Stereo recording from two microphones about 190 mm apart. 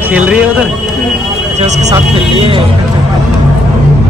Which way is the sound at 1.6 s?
35° right (ahead or behind).